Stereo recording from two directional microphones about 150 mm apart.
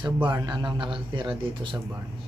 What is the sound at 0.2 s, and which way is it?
A man's voice, 30° right (ahead or behind).